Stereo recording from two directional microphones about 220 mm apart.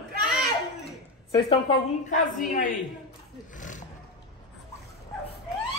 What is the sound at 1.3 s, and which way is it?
Speech, 20° left (ahead or behind).